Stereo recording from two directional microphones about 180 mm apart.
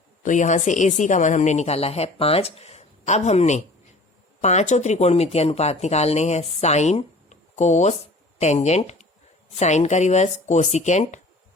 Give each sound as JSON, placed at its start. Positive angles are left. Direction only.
{"t": 0.2, "sound": "speech", "side_deg": 45}